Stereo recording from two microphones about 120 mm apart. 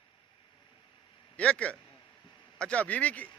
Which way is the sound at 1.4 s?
10° left (ahead or behind).